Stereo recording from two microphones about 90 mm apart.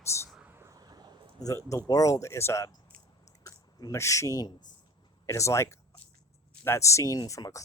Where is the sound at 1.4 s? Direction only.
40° left (ahead or behind).